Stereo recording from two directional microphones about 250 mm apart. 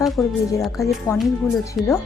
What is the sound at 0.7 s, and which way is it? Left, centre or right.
Speech, centre.